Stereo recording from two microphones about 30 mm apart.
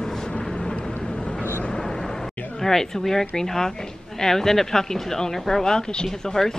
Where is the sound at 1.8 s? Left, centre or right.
Centre.